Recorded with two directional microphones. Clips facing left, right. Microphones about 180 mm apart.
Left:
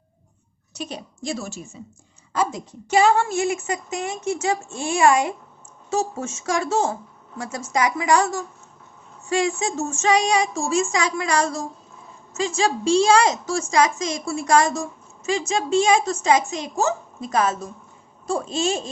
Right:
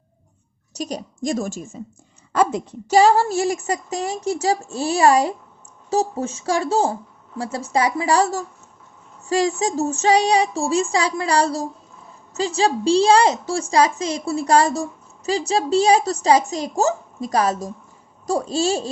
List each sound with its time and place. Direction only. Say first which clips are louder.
0.8 s a woman's voice: right 5 dB; 40° right (ahead or behind)
2.3 s a sound: right 5 dB; 60° right (ahead or behind)
2.9 s a woman's voice: right 3 dB; 35° right (ahead or behind)